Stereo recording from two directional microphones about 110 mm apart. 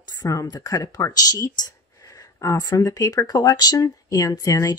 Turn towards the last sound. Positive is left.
turn(degrees=30)  # may be behind; listen again after turning